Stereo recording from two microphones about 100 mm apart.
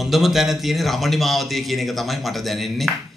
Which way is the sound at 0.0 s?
Centre (ahead or behind).